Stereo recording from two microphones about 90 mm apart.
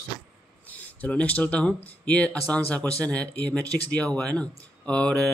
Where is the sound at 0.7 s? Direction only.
15° left (ahead or behind).